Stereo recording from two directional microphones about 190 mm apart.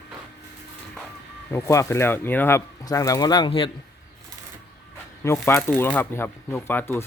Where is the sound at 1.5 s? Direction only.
15° left (ahead or behind).